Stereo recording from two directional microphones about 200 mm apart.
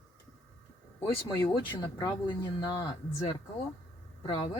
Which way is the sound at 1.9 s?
20° left (ahead or behind).